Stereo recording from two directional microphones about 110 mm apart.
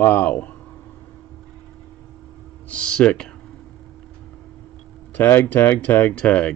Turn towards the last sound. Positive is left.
turn(degrees=10)  # may be behind; listen again after turning